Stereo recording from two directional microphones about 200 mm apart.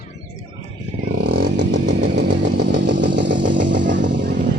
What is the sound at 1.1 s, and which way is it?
Chainsaw, 55° right (ahead or behind).